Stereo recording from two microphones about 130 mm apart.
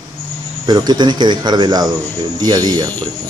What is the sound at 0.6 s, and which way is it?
Speech, 35° right (ahead or behind).